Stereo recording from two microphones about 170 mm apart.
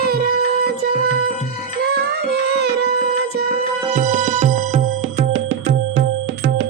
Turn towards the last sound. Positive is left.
turn(degrees=-45)  # may be behind; listen again after turning